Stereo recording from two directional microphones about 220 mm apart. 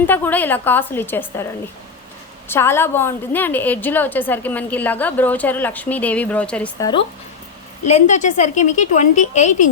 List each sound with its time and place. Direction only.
0.0 s a woman's voice: 10° left (ahead or behind)
2.5 s a woman's voice: 10° left (ahead or behind)
7.9 s a woman's voice: 30° left (ahead or behind)